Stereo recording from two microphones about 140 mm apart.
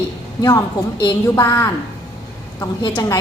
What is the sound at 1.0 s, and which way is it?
A woman's voice, 20° left (ahead or behind).